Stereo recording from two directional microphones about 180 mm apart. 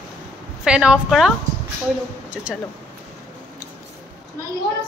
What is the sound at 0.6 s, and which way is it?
Speech, 5° right (ahead or behind).